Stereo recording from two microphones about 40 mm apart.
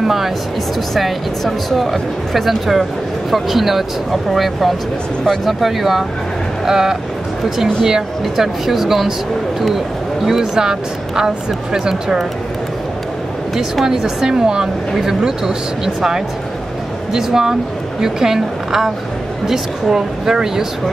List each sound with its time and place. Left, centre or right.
0.0 s speech: centre
0.9 s speech: centre
10.2 s speech: centre
13.8 s speech: centre